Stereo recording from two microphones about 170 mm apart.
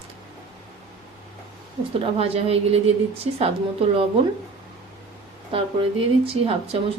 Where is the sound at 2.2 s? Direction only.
35° right (ahead or behind).